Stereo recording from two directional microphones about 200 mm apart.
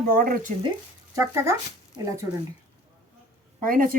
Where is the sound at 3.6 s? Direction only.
45° right (ahead or behind).